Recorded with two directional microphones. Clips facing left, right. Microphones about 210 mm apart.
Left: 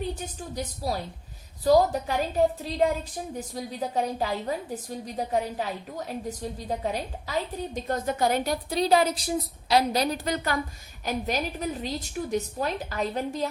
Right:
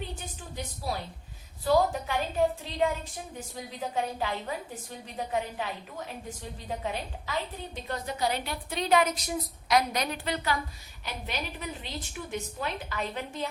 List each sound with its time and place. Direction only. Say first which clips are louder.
0.5 s a woman's voice: left 4 dB; 40° left (ahead or behind)